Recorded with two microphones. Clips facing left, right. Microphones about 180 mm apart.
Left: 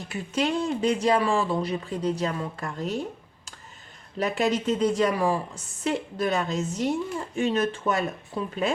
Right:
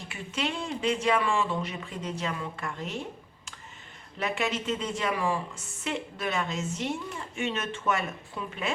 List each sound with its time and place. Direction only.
0.1 s speech: 40° left (ahead or behind)
4.2 s speech: 40° left (ahead or behind)